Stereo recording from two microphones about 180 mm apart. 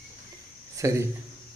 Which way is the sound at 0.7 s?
15° right (ahead or behind).